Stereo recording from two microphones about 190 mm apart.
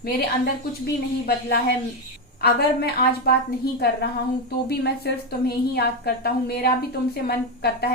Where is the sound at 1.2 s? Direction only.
55° left (ahead or behind).